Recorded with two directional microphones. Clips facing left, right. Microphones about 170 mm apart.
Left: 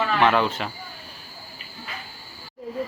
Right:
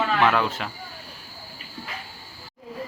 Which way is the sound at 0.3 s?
Centre (ahead or behind).